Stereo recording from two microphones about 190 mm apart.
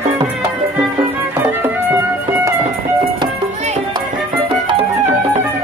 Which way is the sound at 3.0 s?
35° right (ahead or behind).